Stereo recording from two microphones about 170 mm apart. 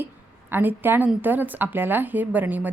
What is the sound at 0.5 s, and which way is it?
Speech, 10° right (ahead or behind).